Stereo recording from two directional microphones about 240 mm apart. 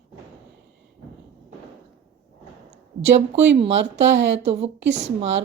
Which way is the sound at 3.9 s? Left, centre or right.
Right.